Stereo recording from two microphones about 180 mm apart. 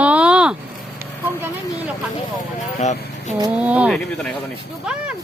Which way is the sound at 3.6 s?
5° right (ahead or behind).